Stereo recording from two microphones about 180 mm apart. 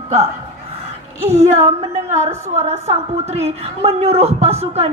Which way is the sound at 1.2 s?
35° right (ahead or behind).